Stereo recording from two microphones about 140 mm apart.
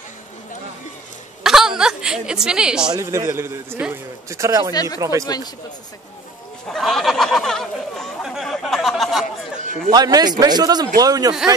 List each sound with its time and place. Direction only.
1.4 s hiccup: 5° right (ahead or behind)
2.9 s a man's voice: 25° right (ahead or behind)
4.7 s speech: 25° left (ahead or behind)
6.7 s a sound: centre (ahead or behind)
9.8 s a man's voice: 25° right (ahead or behind)